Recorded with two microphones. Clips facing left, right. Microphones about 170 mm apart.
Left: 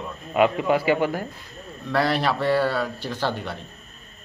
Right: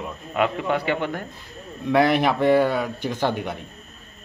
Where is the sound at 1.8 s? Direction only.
15° right (ahead or behind).